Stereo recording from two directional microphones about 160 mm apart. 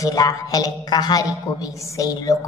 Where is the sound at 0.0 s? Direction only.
25° left (ahead or behind).